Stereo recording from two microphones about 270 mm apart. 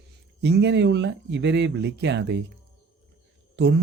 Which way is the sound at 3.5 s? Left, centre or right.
Right.